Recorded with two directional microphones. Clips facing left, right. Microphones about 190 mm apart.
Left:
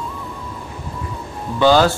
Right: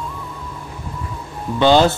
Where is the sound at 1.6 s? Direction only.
20° right (ahead or behind).